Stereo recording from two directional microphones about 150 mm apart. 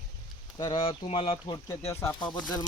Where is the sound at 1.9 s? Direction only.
20° left (ahead or behind).